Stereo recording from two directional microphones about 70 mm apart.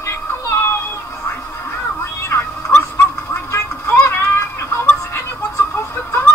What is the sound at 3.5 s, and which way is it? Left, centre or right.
Music, left.